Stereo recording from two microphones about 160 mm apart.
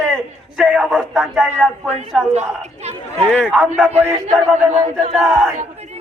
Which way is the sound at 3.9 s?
40° right (ahead or behind).